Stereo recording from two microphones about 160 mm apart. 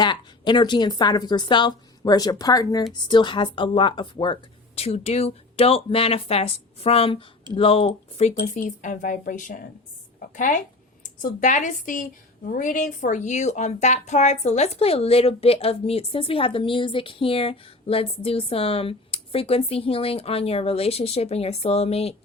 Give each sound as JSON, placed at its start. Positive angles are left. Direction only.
{"t": 0.0, "sound": "a woman's voice", "side_deg": 30}
{"t": 8.6, "sound": "a woman's voice", "side_deg": 55}
{"t": 10.2, "sound": "a sound", "side_deg": 55}
{"t": 11.0, "sound": "speech", "side_deg": 55}